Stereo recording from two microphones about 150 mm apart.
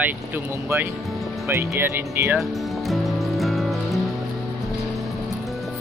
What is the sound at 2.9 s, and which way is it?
Music, centre (ahead or behind).